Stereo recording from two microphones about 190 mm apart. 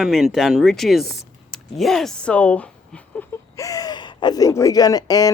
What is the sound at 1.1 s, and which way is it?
Mechanisms, centre (ahead or behind).